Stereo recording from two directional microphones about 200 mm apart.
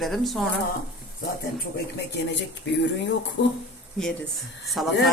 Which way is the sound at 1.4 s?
55° left (ahead or behind).